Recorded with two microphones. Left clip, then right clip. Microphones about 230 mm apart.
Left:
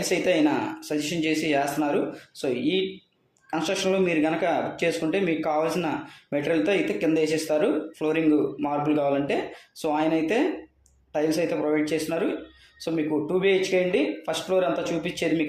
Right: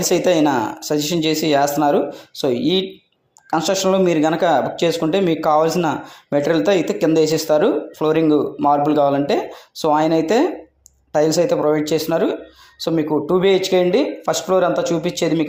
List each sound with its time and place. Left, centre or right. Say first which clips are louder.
0.0 s speech: right 7 dB; right